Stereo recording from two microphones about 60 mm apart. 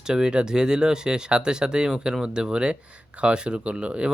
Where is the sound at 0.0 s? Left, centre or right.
Centre.